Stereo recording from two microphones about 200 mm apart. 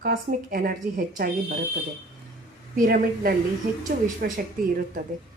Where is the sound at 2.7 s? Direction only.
45° right (ahead or behind).